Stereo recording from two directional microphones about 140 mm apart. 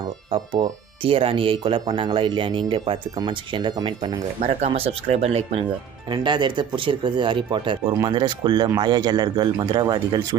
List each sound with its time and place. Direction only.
1.0 s speech: 40° right (ahead or behind)
4.5 s speech: 45° right (ahead or behind)
6.1 s speech: 35° right (ahead or behind)